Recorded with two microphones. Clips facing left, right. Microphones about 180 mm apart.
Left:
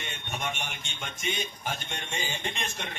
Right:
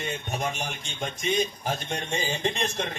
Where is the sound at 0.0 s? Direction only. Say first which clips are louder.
Right 5 dB; 40° right (ahead or behind).